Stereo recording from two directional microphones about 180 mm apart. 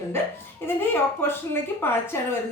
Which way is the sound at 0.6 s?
10° left (ahead or behind).